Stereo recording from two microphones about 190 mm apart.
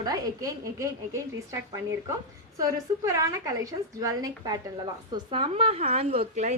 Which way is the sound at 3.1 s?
15° right (ahead or behind).